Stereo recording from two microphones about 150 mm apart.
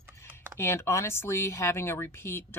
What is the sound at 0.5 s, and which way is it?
Speech, 15° left (ahead or behind).